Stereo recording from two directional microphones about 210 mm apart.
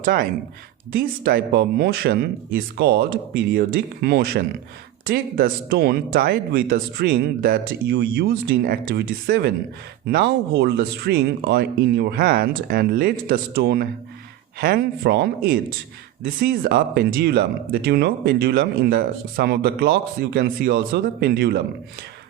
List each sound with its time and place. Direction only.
0.0 s speech: 40° right (ahead or behind)